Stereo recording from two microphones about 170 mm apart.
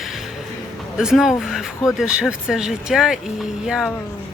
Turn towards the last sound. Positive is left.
turn(degrees=-5)  # may be behind; listen again after turning